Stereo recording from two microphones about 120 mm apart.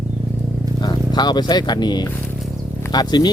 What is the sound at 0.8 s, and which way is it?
Speech, 35° left (ahead or behind).